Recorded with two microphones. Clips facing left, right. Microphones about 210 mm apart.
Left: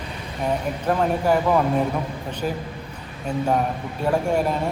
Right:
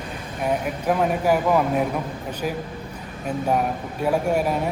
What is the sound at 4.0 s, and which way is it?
Speech, 10° right (ahead or behind).